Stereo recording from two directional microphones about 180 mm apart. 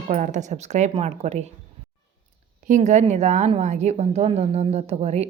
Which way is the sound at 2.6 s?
45° right (ahead or behind).